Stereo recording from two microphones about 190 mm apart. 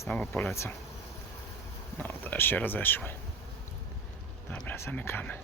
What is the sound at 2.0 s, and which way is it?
Speech, 10° left (ahead or behind).